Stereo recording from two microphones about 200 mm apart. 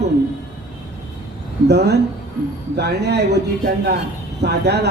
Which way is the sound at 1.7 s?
55° right (ahead or behind).